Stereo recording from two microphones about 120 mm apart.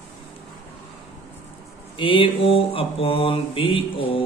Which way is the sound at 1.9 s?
45° left (ahead or behind).